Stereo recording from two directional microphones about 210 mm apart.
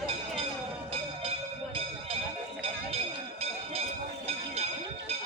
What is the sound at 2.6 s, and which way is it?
Music, 25° right (ahead or behind).